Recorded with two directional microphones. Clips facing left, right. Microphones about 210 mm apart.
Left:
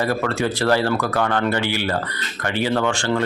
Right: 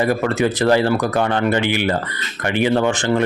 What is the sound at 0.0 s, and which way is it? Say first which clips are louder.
Speech: right 4 dB; 15° right (ahead or behind).